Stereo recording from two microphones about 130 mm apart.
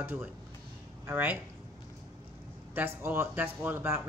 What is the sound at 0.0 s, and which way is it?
Speech, 15° right (ahead or behind).